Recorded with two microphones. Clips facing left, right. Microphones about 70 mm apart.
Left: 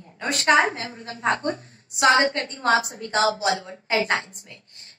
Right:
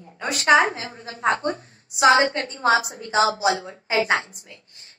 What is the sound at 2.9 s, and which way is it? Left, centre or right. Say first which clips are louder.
Speech: right 3 dB; left.